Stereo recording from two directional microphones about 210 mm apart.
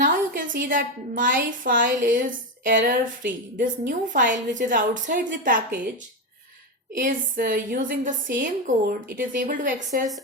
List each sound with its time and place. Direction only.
0.0 s a sound: 40° right (ahead or behind)
0.7 s a woman's voice: 40° right (ahead or behind)
6.9 s a woman's voice: 40° right (ahead or behind)